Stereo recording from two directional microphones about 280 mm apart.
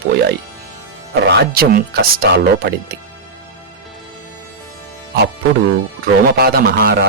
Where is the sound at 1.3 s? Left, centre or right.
Right.